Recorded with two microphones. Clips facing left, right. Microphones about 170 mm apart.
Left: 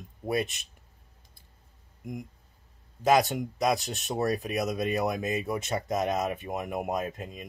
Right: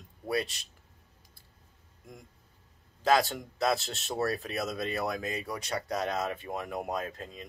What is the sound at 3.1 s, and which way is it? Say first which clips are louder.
Speech: left 3 dB; 15° left (ahead or behind).